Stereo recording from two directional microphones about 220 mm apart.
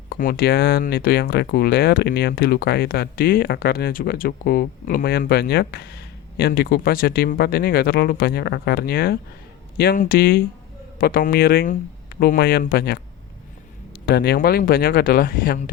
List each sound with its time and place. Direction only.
0.1 s speech: 40° left (ahead or behind)
14.0 s speech: 45° left (ahead or behind)